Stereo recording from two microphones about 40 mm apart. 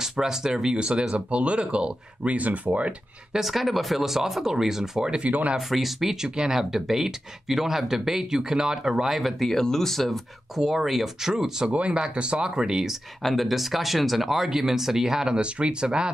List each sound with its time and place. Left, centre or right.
0.0 s speech: centre
0.7 s speech: right
3.3 s speech: centre
5.2 s speech: right
5.7 s speech: centre
9.2 s speech: centre
10.5 s speech: centre
11.9 s speech: right
13.2 s speech: centre; by 16.1 s right